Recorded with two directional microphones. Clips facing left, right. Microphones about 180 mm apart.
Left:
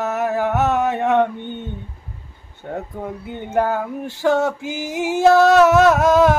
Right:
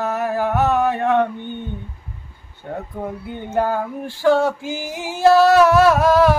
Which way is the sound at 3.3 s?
15° left (ahead or behind).